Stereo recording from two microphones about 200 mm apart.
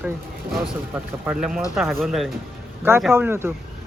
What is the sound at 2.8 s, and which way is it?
Speech, 10° right (ahead or behind).